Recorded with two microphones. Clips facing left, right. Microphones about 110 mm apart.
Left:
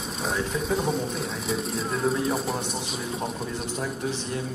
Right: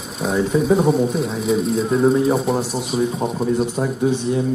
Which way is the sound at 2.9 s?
40° right (ahead or behind).